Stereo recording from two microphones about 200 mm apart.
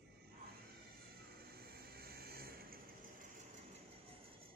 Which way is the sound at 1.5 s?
50° right (ahead or behind).